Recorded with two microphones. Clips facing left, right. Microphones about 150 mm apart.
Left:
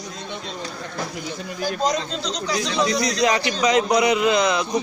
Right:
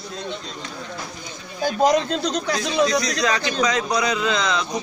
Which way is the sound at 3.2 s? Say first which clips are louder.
Left 2 dB; 20° left (ahead or behind).